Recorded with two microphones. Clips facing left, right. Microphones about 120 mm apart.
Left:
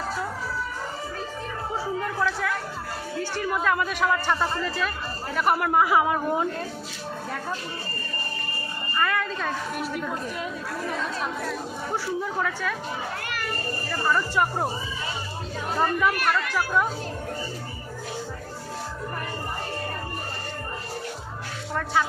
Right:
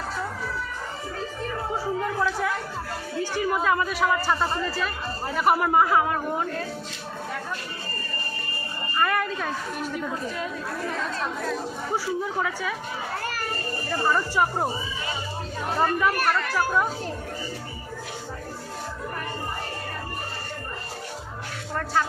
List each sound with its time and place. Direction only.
2.0 s chatter: 5° right (ahead or behind)
3.2 s speech: 5° right (ahead or behind)
5.9 s a man's voice: 15° left (ahead or behind)
9.0 s a sound: 10° right (ahead or behind)
9.8 s speech: 5° left (ahead or behind)
11.9 s a woman's voice: 5° right (ahead or behind)
13.9 s a woman's voice: 10° right (ahead or behind)
15.8 s speech: centre (ahead or behind)